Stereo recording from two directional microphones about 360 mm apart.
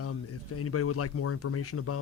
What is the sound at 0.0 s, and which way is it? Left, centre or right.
Speech, left.